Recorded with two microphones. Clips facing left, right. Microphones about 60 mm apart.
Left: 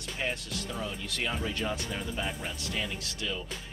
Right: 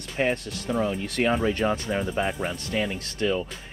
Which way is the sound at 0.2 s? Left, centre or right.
Right.